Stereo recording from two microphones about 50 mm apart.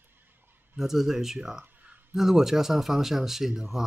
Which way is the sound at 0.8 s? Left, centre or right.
Centre.